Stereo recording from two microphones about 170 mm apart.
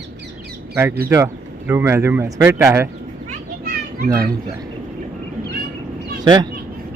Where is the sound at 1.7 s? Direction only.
15° right (ahead or behind).